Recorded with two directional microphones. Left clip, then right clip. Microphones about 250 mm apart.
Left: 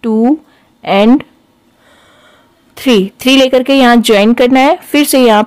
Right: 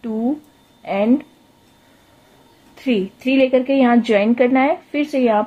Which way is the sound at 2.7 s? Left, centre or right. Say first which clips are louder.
Left 10 dB; left.